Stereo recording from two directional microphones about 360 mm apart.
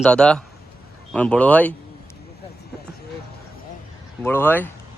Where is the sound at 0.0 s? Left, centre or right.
Centre.